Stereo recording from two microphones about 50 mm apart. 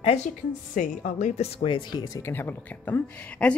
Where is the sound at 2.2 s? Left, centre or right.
Left.